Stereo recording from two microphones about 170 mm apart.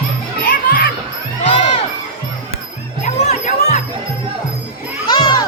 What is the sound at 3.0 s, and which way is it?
Music, 40° left (ahead or behind).